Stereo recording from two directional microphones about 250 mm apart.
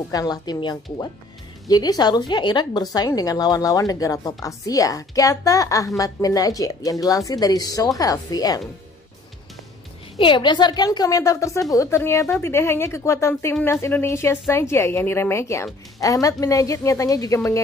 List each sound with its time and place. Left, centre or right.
0.1 s speech: centre
10.1 s speech: centre